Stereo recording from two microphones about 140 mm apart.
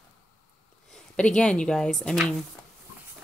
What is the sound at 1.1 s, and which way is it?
A woman's voice, 10° left (ahead or behind).